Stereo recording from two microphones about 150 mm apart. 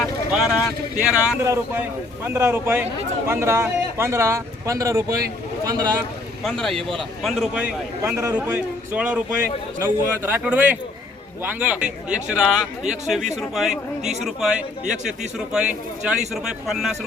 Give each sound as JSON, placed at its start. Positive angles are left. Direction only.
{"t": 0.0, "sound": "speech", "side_deg": -5}
{"t": 1.4, "sound": "a man's voice", "side_deg": -20}
{"t": 6.4, "sound": "a man's voice", "side_deg": 5}